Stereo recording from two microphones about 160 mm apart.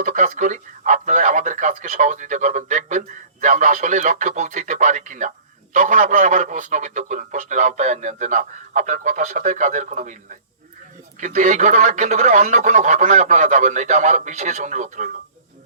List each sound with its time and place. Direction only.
0.0 s a man's voice: 50° right (ahead or behind)
11.2 s a man's voice: 45° right (ahead or behind)